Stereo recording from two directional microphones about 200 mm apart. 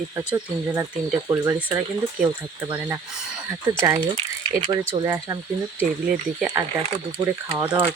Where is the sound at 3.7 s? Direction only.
10° right (ahead or behind).